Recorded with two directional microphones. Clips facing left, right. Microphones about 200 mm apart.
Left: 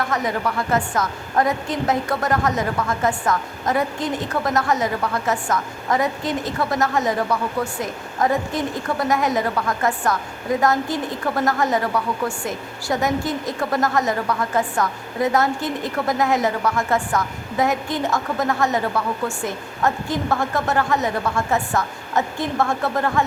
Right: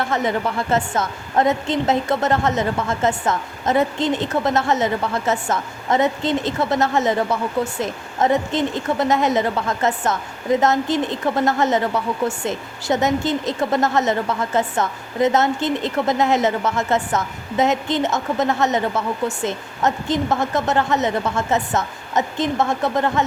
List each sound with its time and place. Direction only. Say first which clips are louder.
0.0 s a woman's voice: right 2 dB; 25° right (ahead or behind)